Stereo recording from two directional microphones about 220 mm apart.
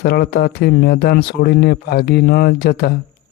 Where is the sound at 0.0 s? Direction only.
45° left (ahead or behind).